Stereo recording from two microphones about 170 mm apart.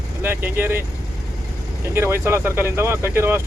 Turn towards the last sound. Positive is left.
turn(degrees=-15)  # may be behind; listen again after turning